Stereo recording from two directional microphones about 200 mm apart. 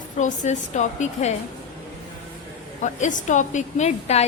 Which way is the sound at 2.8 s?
35° left (ahead or behind).